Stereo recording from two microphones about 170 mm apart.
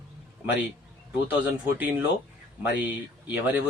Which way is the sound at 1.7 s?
10° right (ahead or behind).